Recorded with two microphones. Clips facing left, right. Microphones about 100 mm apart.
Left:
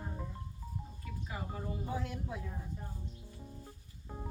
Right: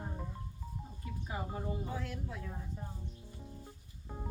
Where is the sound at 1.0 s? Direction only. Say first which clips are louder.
Right 3 dB; 25° right (ahead or behind).